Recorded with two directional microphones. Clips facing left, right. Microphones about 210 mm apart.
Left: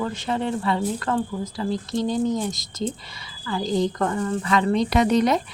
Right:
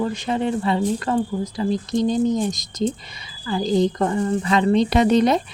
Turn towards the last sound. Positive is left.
turn(degrees=-25)  # may be behind; listen again after turning